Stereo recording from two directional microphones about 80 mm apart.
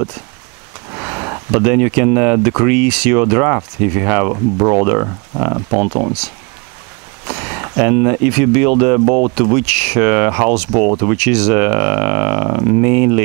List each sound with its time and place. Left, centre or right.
0.9 s speech: centre